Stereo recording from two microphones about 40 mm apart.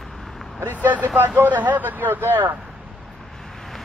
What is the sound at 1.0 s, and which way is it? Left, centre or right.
Speech, right.